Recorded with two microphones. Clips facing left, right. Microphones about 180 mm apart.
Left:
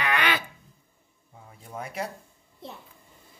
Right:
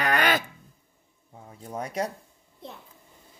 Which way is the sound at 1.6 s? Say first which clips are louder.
Right 4 dB; 35° right (ahead or behind).